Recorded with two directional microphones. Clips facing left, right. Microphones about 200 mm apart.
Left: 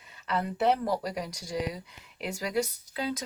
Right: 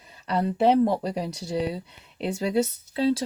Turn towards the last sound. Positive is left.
turn(degrees=-30)  # may be behind; listen again after turning